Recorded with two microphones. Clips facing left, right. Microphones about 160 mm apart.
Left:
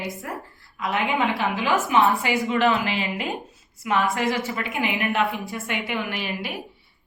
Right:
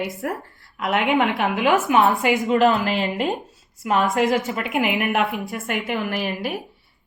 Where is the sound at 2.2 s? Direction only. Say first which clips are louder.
Right 4 dB; 45° right (ahead or behind).